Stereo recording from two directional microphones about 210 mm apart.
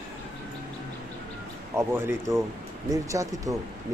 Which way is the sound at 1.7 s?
10° right (ahead or behind).